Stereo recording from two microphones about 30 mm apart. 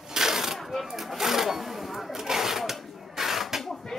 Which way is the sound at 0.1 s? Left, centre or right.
Centre.